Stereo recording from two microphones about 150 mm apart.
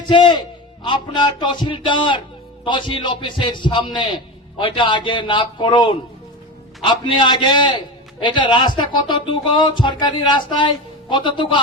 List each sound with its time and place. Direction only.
0.0 s a man's voice: 30° left (ahead or behind)